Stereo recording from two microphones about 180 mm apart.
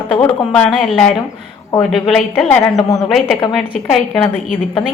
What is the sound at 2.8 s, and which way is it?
Speech, 20° left (ahead or behind).